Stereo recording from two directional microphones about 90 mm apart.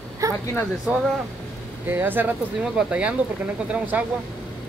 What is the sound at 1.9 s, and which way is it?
Speech, 20° right (ahead or behind).